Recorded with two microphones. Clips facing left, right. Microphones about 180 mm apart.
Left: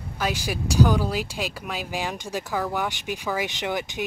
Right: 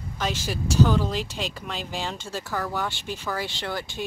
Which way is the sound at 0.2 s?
10° left (ahead or behind).